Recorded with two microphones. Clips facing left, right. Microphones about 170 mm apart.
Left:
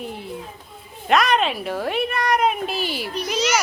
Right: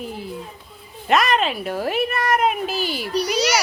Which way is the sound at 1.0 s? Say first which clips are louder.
Even; centre (ahead or behind).